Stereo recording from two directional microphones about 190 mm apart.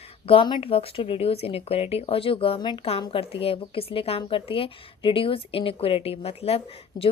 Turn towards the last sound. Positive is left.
turn(degrees=20)  # may be behind; listen again after turning